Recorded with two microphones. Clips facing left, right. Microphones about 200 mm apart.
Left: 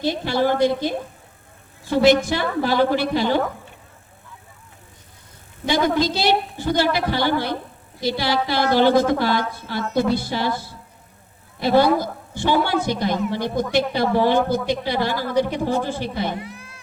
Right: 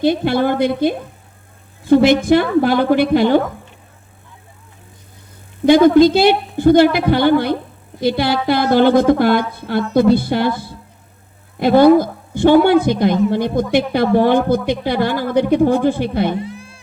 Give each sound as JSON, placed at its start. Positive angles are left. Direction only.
{"t": 0.0, "sound": "speech", "side_deg": -55}
{"t": 5.6, "sound": "speech", "side_deg": -55}
{"t": 16.4, "sound": "music", "side_deg": -30}